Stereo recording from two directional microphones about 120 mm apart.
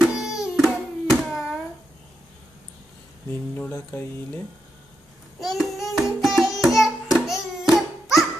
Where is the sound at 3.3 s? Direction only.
15° left (ahead or behind).